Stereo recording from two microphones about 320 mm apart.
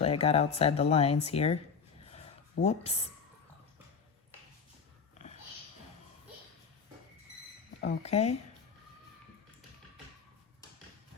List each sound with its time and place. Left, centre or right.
0.0 s speech: centre
2.0 s a sound: centre
7.8 s speech: left